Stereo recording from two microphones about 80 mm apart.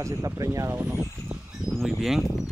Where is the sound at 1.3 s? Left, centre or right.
Centre.